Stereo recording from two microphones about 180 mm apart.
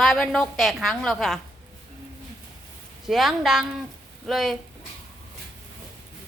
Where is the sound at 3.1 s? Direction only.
Centre (ahead or behind).